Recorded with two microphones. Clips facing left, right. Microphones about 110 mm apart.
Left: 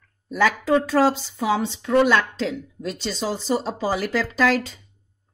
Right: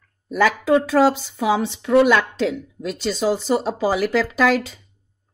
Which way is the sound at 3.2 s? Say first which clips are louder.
Right 5 dB; 55° right (ahead or behind).